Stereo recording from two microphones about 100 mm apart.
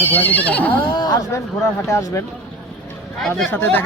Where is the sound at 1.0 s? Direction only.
40° left (ahead or behind).